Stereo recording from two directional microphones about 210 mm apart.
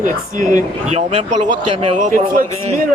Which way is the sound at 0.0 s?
40° right (ahead or behind).